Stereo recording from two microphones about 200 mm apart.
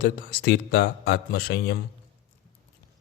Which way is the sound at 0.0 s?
50° left (ahead or behind).